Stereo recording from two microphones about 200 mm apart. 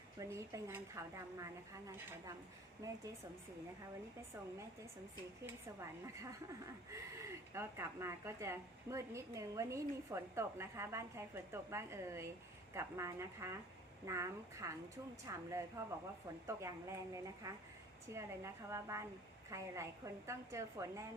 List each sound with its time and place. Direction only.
0.2 s speech: 15° right (ahead or behind)
6.9 s speech: 15° right (ahead or behind)